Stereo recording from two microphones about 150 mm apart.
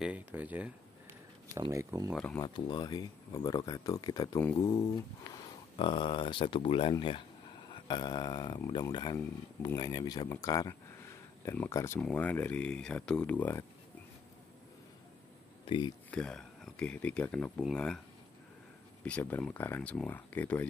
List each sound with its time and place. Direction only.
0.0 s speech: 10° right (ahead or behind)
1.5 s speech: 20° right (ahead or behind)
2.1 s speech: 5° left (ahead or behind)
2.4 s speech: 30° left (ahead or behind); by 13.7 s 15° left (ahead or behind)
15.6 s a sound: 35° left (ahead or behind)
16.1 s speech: 5° left (ahead or behind)
19.0 s speech: 10° left (ahead or behind)